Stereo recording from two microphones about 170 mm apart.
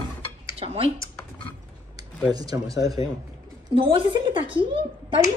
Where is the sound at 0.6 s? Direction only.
35° right (ahead or behind).